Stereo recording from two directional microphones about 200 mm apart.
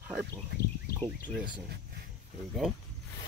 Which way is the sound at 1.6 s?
55° right (ahead or behind).